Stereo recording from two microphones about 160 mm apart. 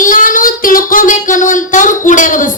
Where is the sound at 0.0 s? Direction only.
55° left (ahead or behind).